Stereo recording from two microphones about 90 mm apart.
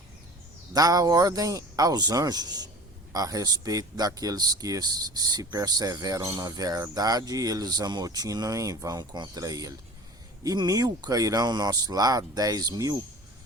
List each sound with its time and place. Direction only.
0.7 s speech: 45° right (ahead or behind)